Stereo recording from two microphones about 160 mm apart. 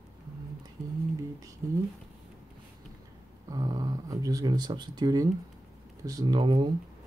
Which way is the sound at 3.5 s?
25° right (ahead or behind).